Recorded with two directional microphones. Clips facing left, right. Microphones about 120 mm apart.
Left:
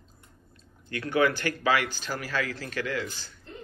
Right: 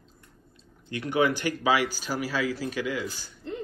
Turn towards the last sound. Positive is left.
turn(degrees=-10)  # may be behind; listen again after turning